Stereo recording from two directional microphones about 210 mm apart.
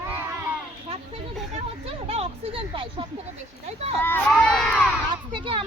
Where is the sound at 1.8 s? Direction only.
30° right (ahead or behind).